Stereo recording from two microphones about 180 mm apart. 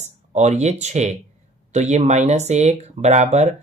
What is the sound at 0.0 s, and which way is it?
Speech, 40° right (ahead or behind).